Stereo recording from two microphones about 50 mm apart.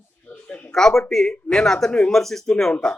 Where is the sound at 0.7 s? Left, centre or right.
Centre.